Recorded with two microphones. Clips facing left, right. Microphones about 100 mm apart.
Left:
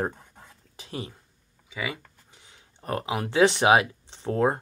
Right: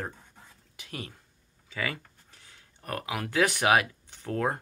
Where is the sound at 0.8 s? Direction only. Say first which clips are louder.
Left 5 dB; 25° left (ahead or behind).